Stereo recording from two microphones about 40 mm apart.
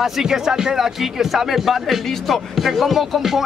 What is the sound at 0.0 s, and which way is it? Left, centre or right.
Speech, centre.